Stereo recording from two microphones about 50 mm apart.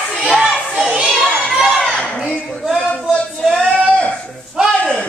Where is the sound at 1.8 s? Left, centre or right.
Centre.